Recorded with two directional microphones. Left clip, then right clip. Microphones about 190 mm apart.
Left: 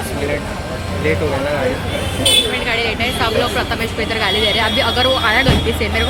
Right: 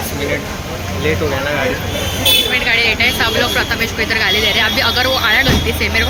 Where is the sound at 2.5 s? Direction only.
15° left (ahead or behind).